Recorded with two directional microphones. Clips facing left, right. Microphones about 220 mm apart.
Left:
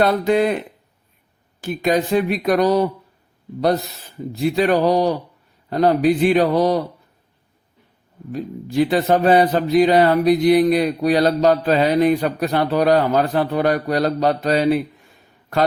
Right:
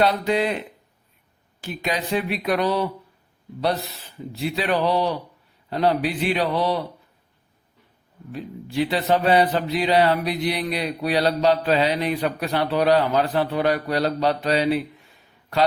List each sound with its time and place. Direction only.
0.0 s a man's voice: 50° left (ahead or behind)
1.6 s a man's voice: 50° left (ahead or behind)
4.3 s a man's voice: 45° left (ahead or behind)
8.3 s a man's voice: 45° left (ahead or behind)